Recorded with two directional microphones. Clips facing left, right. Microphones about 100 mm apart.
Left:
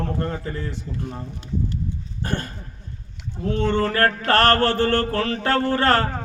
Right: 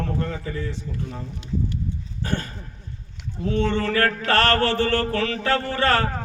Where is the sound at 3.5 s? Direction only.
40° left (ahead or behind).